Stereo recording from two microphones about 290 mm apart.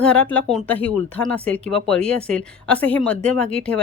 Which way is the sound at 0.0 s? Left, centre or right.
Centre.